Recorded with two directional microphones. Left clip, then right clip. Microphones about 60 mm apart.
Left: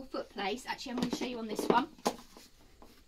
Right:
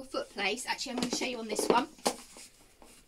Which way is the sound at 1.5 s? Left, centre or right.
Left.